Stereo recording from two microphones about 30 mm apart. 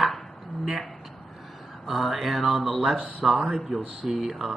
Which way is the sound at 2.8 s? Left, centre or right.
Centre.